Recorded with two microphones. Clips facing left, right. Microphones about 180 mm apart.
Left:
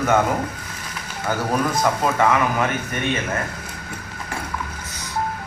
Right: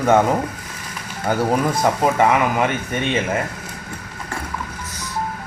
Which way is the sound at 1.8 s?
20° right (ahead or behind).